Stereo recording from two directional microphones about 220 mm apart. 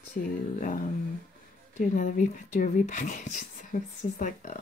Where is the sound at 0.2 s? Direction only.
40° left (ahead or behind).